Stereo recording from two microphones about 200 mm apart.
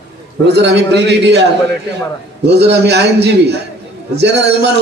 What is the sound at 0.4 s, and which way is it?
Speech, 60° right (ahead or behind).